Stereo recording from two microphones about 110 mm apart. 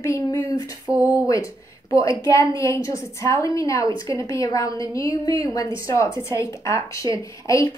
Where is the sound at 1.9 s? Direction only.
30° left (ahead or behind).